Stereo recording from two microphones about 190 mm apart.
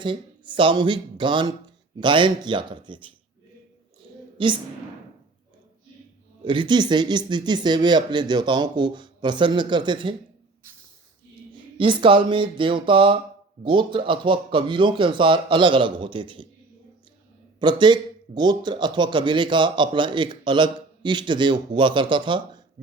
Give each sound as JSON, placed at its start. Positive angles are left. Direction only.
{"t": 0.0, "sound": "a man's voice", "side_deg": -25}
{"t": 4.0, "sound": "a sound", "side_deg": -30}
{"t": 4.4, "sound": "a man's voice", "side_deg": -25}
{"t": 6.4, "sound": "a man's voice", "side_deg": -25}
{"t": 11.5, "sound": "a man's voice", "side_deg": -25}
{"t": 17.6, "sound": "a man's voice", "side_deg": -25}